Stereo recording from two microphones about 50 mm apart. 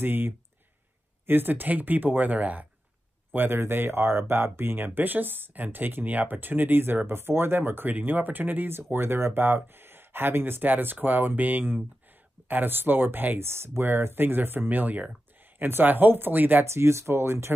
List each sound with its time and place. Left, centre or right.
0.0 s speech: right
3.3 s speech: right
13.4 s speech: right
16.6 s speech: right